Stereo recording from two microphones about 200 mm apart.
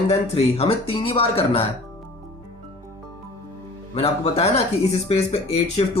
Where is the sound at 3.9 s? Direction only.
30° left (ahead or behind).